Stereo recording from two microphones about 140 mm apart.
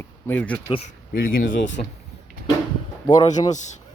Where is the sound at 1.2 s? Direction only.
85° left.